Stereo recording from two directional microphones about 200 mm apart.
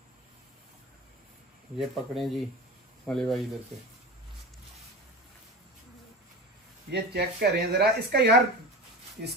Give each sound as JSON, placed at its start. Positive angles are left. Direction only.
{"t": 1.8, "sound": "speech", "side_deg": 0}
{"t": 6.9, "sound": "speech", "side_deg": -55}